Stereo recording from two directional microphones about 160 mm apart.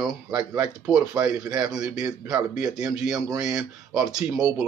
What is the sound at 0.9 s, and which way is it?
Speech, 10° right (ahead or behind).